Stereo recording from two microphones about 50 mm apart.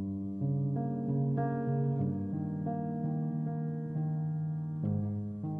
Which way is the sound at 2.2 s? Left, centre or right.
Right.